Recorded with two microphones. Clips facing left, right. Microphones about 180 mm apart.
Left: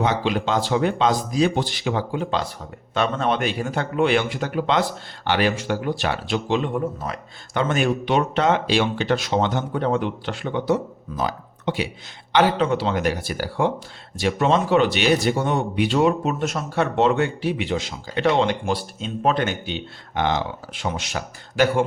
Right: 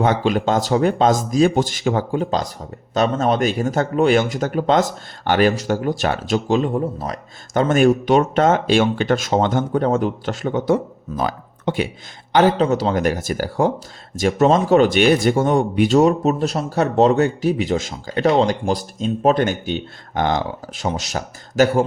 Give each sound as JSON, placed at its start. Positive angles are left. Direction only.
{"t": 0.0, "sound": "speech", "side_deg": -50}